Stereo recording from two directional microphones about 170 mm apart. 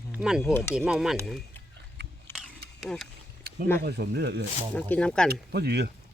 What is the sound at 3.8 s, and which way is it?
Speech, 75° right (ahead or behind).